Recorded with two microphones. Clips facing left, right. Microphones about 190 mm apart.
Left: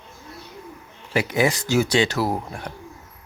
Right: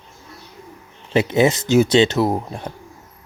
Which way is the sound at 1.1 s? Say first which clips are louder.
Right 5 dB; 25° right (ahead or behind).